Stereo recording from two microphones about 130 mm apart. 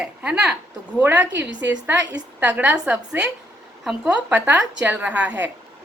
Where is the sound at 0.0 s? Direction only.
5° right (ahead or behind).